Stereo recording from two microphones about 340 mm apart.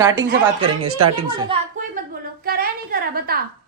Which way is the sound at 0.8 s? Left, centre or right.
Right.